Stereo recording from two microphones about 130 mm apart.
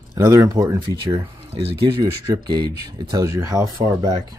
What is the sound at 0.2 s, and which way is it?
Speech, 25° right (ahead or behind).